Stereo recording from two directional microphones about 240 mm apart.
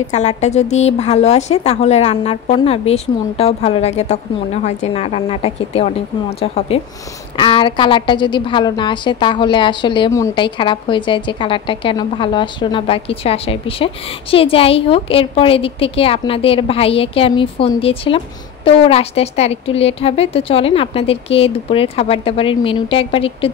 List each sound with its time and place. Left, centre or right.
0.0 s a woman's voice: left